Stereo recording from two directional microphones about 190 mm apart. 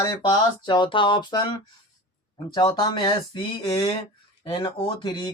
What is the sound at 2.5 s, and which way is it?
Speech, 20° left (ahead or behind).